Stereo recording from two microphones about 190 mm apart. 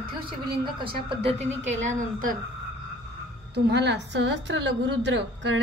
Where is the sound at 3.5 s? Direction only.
60° right (ahead or behind).